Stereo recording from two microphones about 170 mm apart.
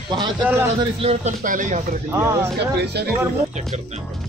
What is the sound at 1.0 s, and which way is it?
Speech, 35° right (ahead or behind).